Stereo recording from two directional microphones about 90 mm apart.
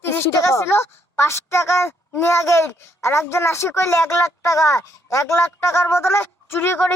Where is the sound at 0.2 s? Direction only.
35° left (ahead or behind).